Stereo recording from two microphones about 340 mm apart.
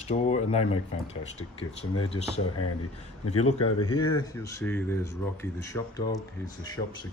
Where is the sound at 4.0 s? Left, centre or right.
Centre.